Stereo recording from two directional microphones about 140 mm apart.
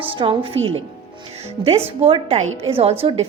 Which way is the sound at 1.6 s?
30° right (ahead or behind).